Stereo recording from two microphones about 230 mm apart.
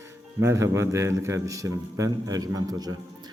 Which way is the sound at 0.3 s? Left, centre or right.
Centre.